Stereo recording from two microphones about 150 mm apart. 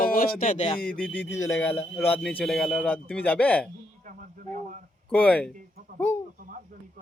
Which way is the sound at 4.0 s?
60° right (ahead or behind).